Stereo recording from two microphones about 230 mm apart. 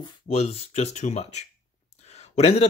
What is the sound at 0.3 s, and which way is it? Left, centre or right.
Speech, left.